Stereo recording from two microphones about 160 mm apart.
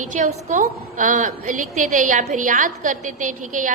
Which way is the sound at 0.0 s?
50° right (ahead or behind).